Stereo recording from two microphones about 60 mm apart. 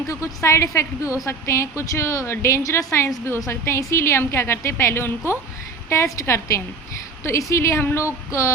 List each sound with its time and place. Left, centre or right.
0.1 s a woman's voice: left